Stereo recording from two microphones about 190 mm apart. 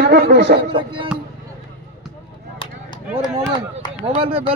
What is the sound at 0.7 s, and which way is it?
Speech, 25° right (ahead or behind).